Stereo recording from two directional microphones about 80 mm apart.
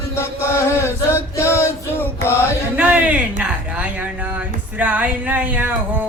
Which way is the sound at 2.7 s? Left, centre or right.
Centre.